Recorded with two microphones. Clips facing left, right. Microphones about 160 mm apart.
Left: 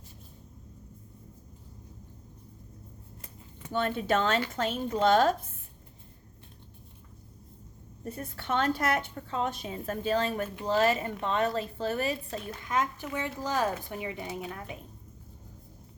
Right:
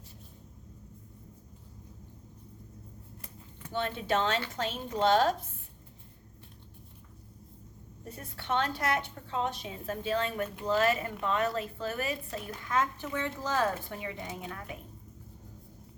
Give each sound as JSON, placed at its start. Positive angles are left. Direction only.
{"t": 3.7, "sound": "a woman's voice", "side_deg": 50}
{"t": 8.1, "sound": "a woman's voice", "side_deg": 45}
{"t": 12.6, "sound": "speech", "side_deg": 15}